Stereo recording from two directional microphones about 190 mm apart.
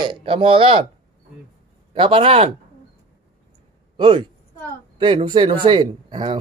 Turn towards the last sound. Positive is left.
turn(degrees=-25)  # may be behind; listen again after turning